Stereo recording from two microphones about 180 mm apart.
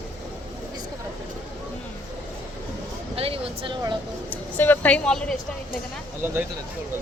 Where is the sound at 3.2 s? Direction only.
30° right (ahead or behind).